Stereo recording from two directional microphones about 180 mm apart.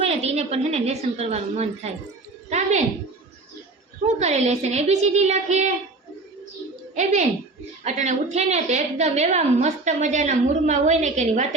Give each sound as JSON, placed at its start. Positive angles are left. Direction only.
{"t": 0.0, "sound": "a woman's voice", "side_deg": -35}
{"t": 2.5, "sound": "a sound", "side_deg": -40}
{"t": 4.0, "sound": "a woman's voice", "side_deg": -40}
{"t": 6.9, "sound": "a woman's voice", "side_deg": -40}